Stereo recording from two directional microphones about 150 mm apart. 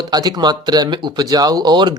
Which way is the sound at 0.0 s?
25° right (ahead or behind).